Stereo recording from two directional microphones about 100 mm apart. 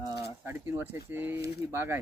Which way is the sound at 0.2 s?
25° right (ahead or behind).